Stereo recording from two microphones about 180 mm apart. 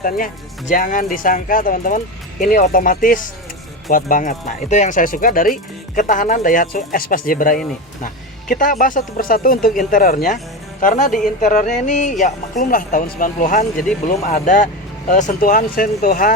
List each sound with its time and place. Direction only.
0.7 s speech: 45° left (ahead or behind)
11.4 s music: 40° left (ahead or behind)
12.2 s speech: 45° left (ahead or behind)